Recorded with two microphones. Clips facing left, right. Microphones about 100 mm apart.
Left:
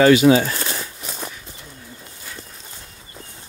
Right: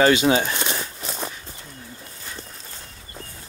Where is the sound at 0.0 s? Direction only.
25° right (ahead or behind).